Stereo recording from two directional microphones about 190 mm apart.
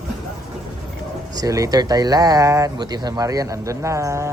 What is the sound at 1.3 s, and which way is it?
Speech, 20° right (ahead or behind).